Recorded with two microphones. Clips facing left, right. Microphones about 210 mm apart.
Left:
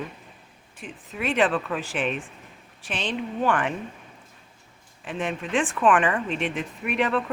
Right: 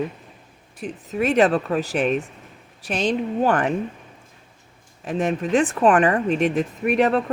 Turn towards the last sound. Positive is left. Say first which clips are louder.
# right 6 dB
turn(degrees=-40)  # may be behind; listen again after turning